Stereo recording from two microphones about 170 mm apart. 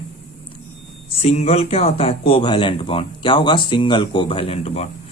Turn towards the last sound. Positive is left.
turn(degrees=35)  # may be behind; listen again after turning